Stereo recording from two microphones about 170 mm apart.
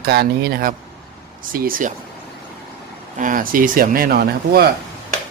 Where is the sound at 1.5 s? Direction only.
60° right (ahead or behind).